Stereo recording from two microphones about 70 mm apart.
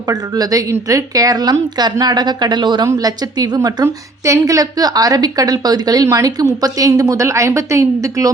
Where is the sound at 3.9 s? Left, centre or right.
Right.